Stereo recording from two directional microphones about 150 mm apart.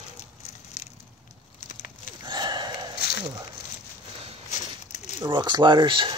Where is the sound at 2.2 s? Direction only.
30° right (ahead or behind).